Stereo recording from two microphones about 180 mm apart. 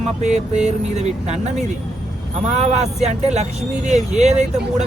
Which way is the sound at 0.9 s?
40° right (ahead or behind).